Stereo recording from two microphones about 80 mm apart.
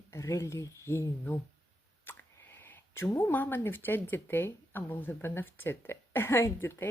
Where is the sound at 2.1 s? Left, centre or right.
Left.